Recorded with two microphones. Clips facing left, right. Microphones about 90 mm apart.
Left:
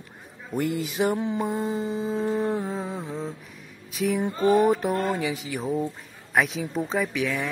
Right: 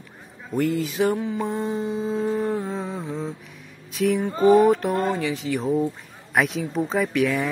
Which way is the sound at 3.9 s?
Centre (ahead or behind).